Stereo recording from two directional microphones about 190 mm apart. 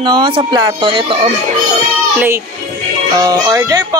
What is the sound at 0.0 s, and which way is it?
Speech, 25° right (ahead or behind).